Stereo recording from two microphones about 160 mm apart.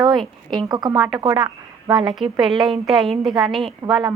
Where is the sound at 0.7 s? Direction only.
25° right (ahead or behind).